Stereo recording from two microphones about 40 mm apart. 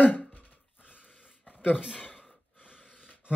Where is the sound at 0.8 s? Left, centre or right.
Left.